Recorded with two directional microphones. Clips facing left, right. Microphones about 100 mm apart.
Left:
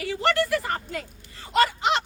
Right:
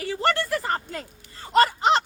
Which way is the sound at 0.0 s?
35° right (ahead or behind).